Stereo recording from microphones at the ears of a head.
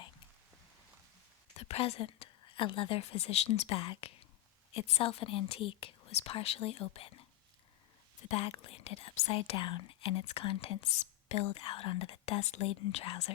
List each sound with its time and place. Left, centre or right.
1.5 s a woman's voice: left